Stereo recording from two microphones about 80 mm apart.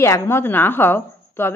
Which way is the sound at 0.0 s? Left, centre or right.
Left.